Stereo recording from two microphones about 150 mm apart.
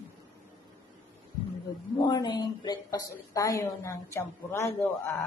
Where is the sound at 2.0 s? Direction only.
30° left (ahead or behind).